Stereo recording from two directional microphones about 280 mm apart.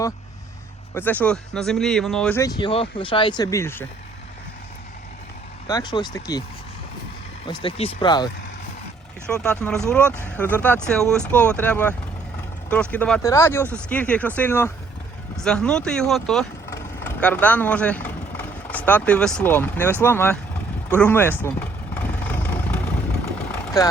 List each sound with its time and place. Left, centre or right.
0.9 s speech: centre
5.6 s speech: centre
7.6 s speech: left
9.3 s speech: centre
21.0 s vehicle: centre